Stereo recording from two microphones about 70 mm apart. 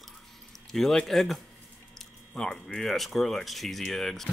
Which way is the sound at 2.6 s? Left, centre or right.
Centre.